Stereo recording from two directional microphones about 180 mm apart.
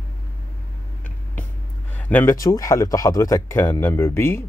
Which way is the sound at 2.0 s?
10° left (ahead or behind).